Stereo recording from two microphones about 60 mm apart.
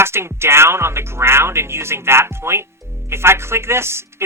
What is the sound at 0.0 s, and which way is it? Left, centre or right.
Speech, right.